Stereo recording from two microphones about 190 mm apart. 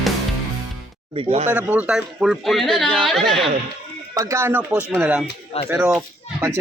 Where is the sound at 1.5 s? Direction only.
10° right (ahead or behind).